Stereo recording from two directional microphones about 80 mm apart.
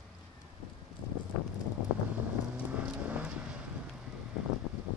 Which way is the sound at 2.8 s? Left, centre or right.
Centre.